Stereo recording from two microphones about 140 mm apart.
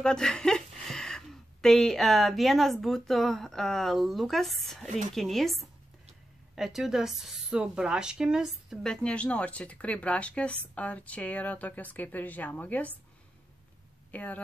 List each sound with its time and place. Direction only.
0.0 s a woman's voice: 5° left (ahead or behind)
4.8 s a woman's voice: 60° right (ahead or behind)
5.1 s a woman's voice: centre (ahead or behind)
14.1 s speech: 10° left (ahead or behind)